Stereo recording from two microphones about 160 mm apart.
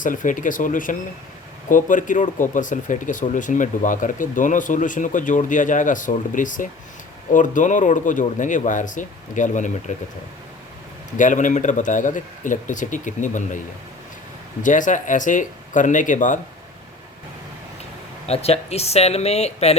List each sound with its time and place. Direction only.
0.0 s speech: 55° left (ahead or behind)
11.2 s speech: 50° left (ahead or behind)
14.6 s speech: 55° left (ahead or behind)
18.3 s speech: 40° left (ahead or behind)